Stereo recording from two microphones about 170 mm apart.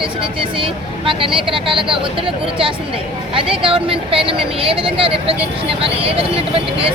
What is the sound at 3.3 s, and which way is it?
Speech, 30° right (ahead or behind).